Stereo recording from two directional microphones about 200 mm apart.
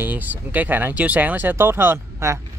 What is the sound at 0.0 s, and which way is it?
Speech, 10° right (ahead or behind).